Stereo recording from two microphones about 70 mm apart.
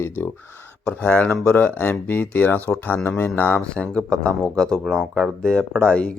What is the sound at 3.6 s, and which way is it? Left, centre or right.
Speech, centre.